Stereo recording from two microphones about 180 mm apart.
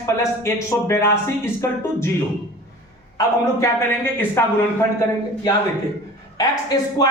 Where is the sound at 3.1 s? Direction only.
15° left (ahead or behind).